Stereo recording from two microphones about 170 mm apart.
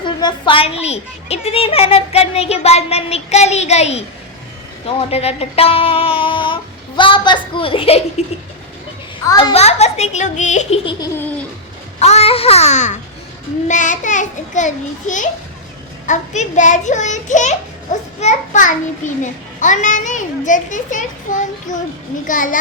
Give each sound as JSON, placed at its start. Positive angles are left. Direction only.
{"t": 0.0, "sound": "a child's voice", "side_deg": 25}
{"t": 9.4, "sound": "a child's voice", "side_deg": 35}
{"t": 11.2, "sound": "a sound", "side_deg": 10}
{"t": 11.9, "sound": "a child's voice", "side_deg": 40}